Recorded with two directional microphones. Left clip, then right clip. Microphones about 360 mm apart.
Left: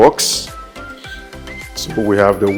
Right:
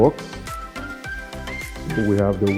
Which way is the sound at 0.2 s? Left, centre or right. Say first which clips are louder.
Left 16 dB; centre.